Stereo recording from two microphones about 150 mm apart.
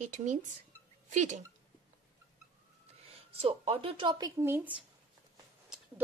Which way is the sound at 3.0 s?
40° right (ahead or behind).